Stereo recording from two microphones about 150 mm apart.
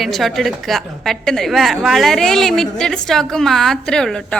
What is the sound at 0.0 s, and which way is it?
A woman's voice, centre (ahead or behind).